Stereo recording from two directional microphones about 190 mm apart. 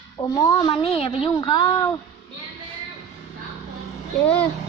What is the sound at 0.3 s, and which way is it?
Speech, 15° left (ahead or behind).